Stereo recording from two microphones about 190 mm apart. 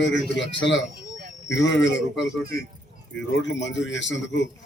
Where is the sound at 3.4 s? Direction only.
70° left (ahead or behind).